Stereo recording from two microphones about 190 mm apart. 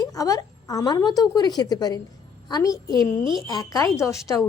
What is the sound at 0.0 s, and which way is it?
A woman's voice, 20° left (ahead or behind).